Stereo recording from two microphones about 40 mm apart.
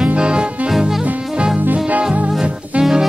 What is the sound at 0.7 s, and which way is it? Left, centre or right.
Music, centre.